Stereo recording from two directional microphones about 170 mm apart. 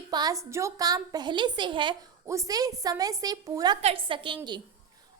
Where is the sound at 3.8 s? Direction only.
35° right (ahead or behind).